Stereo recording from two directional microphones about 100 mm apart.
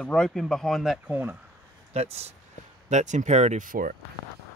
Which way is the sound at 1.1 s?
20° right (ahead or behind).